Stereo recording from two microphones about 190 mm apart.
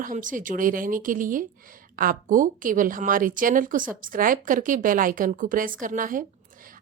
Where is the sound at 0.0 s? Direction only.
45° right (ahead or behind).